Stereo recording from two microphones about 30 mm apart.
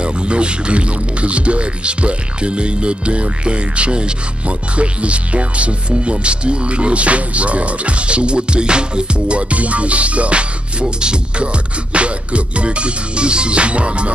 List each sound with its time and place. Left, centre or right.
0.0 s speech: right
9.5 s music: right
11.9 s speech: right